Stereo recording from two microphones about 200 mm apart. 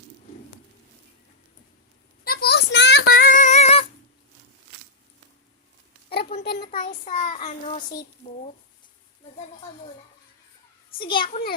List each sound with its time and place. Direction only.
2.2 s female singing: 50° left (ahead or behind); by 3.8 s 30° left (ahead or behind)
6.1 s a sound: 50° left (ahead or behind)
6.7 s a child's voice: 40° left (ahead or behind)
10.9 s a child's voice: 25° left (ahead or behind)